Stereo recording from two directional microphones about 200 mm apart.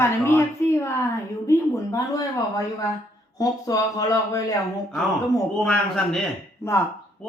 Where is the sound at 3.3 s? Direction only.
15° left (ahead or behind).